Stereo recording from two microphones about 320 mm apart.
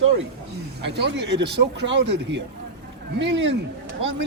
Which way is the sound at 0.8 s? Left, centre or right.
Right.